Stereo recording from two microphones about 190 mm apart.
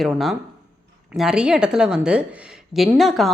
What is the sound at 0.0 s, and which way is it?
A woman's voice, centre (ahead or behind).